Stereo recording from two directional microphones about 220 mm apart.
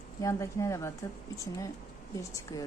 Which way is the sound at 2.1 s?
15° left (ahead or behind).